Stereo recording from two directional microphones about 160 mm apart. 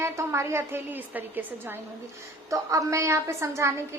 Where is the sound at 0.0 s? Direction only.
15° right (ahead or behind).